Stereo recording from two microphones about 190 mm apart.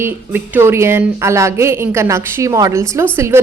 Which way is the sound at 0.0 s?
10° right (ahead or behind).